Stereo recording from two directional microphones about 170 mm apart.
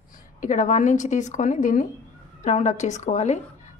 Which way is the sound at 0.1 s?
50° left (ahead or behind).